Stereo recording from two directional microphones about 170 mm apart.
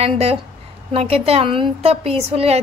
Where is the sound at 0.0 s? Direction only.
35° right (ahead or behind).